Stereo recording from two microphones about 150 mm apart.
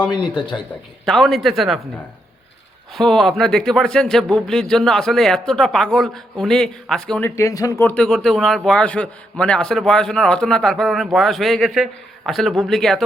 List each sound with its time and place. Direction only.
0.1 s speech: 30° left (ahead or behind)
1.0 s speech: 5° left (ahead or behind)
2.9 s speech: 5° left (ahead or behind)
7.3 s speech: 20° left (ahead or behind); by 13.0 s centre (ahead or behind)